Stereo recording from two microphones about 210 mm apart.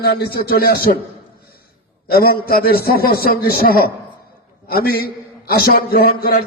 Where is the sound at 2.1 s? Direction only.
45° left (ahead or behind).